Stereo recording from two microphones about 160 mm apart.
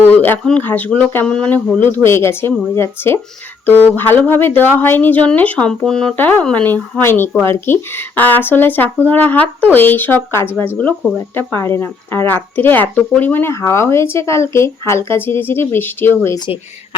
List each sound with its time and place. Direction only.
0.0 s speech: 10° left (ahead or behind)